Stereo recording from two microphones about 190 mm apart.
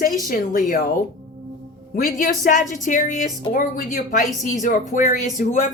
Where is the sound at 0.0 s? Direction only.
45° left (ahead or behind).